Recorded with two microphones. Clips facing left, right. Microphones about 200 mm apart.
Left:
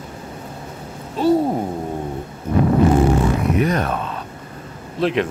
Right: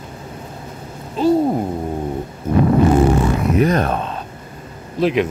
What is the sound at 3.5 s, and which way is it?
Speech, 35° right (ahead or behind).